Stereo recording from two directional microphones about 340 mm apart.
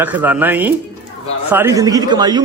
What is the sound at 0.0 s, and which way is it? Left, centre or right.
A man's voice, centre.